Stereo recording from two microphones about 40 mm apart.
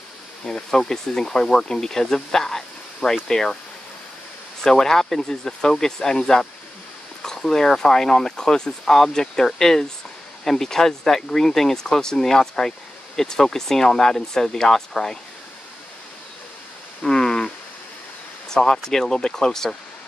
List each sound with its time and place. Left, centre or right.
0.7 s speech: centre
4.6 s speech: centre
17.0 s a sound: centre
18.5 s speech: centre